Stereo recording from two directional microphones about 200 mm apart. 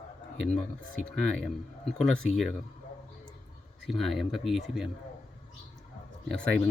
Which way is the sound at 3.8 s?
Centre (ahead or behind).